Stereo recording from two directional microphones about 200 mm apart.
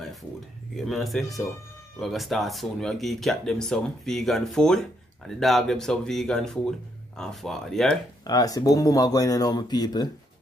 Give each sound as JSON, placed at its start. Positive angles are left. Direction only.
{"t": 0.7, "sound": "speech", "side_deg": 0}
{"t": 8.2, "sound": "speech", "side_deg": 20}